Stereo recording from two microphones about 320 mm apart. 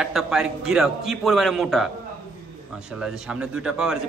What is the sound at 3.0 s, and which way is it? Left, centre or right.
A man's voice, centre.